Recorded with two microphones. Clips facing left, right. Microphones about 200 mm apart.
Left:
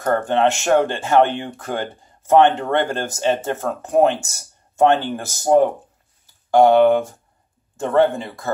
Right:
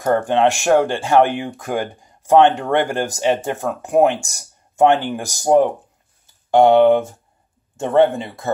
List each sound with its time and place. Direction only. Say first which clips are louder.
0.0 s speech: right 2 dB; 15° right (ahead or behind)